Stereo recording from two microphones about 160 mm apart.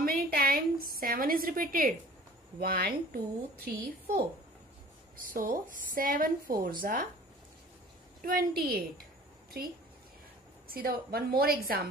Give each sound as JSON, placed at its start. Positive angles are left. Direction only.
{"t": 0.0, "sound": "a woman's voice", "side_deg": -70}
{"t": 8.2, "sound": "a woman's voice", "side_deg": -60}
{"t": 10.7, "sound": "a woman's voice", "side_deg": -70}